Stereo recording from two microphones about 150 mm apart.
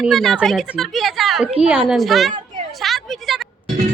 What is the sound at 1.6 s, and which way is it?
Speech, 10° right (ahead or behind).